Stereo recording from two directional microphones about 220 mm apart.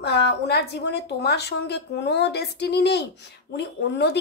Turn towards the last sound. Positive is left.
turn(degrees=50)  # may be behind; listen again after turning